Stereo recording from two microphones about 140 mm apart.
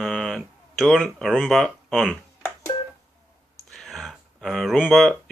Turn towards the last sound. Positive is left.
turn(degrees=0)  # may be behind; listen again after turning